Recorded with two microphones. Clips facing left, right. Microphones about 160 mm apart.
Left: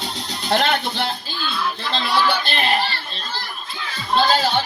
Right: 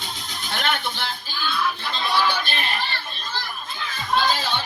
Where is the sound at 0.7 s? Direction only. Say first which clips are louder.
Left 6 dB; 35° left (ahead or behind).